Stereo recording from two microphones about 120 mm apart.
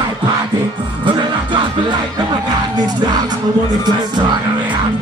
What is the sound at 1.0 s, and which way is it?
Music, 40° right (ahead or behind).